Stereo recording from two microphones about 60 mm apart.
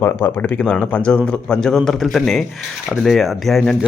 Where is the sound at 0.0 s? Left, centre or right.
Left; by 1.7 s centre.